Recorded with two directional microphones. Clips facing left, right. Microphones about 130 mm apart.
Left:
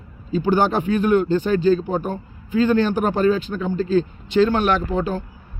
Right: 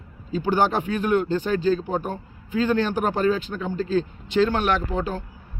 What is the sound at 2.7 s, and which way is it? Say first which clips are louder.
Speech: left 4 dB; 10° left (ahead or behind).